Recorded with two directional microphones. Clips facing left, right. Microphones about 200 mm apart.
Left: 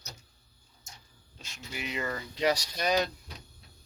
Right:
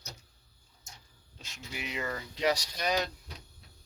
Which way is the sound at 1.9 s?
5° right (ahead or behind).